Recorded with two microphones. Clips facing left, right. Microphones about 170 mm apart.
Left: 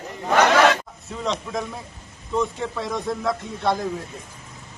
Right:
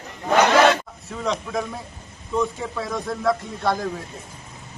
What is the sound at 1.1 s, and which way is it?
Speech, centre (ahead or behind).